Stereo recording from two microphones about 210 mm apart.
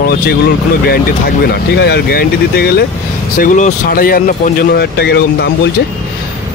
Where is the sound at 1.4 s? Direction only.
50° left (ahead or behind).